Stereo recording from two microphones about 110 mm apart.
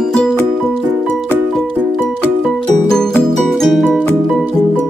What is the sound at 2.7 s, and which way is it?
Music, 5° left (ahead or behind).